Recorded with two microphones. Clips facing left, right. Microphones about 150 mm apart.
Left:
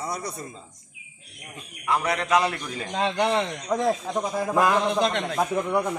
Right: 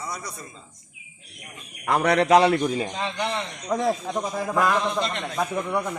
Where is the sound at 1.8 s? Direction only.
40° right (ahead or behind).